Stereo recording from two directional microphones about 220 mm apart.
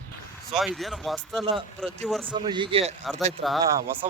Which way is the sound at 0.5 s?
Centre (ahead or behind).